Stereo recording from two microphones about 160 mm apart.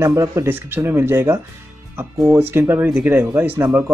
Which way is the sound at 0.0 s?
15° right (ahead or behind).